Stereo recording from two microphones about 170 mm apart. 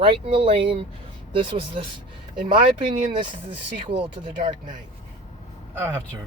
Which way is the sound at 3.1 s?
25° right (ahead or behind).